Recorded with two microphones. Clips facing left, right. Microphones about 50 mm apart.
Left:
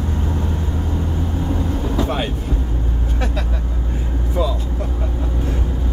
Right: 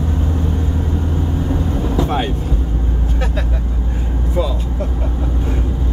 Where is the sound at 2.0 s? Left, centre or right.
Centre.